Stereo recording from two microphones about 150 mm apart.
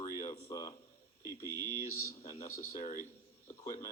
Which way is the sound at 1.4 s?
20° right (ahead or behind).